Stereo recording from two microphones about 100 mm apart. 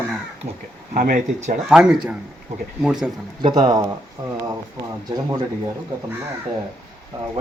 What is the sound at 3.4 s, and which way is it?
Speech, 45° right (ahead or behind).